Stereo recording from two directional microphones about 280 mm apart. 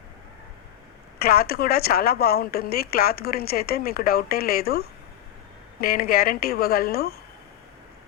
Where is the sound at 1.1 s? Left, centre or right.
Left.